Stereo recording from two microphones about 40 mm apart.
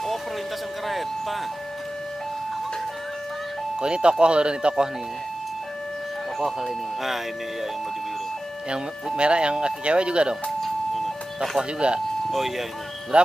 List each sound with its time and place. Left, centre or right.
0.8 s doorbell: centre
3.8 s speech: right
6.4 s speech: centre
8.6 s speech: right
10.6 s siren: centre
11.8 s speech: right
12.3 s speech: centre
13.1 s speech: right